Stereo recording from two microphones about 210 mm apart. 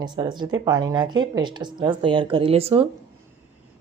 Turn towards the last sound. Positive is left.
turn(degrees=-25)  # may be behind; listen again after turning